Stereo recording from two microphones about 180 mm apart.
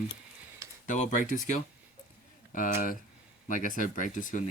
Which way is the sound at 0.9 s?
45° left (ahead or behind).